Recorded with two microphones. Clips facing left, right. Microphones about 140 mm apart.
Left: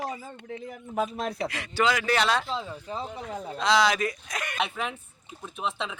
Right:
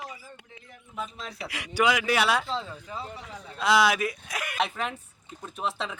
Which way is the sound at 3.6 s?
5° right (ahead or behind).